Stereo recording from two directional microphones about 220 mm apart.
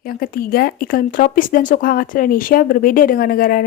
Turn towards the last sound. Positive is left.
turn(degrees=40)  # may be behind; listen again after turning